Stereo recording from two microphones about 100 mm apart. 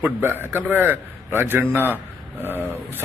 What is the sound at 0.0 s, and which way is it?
A man's voice, 20° right (ahead or behind).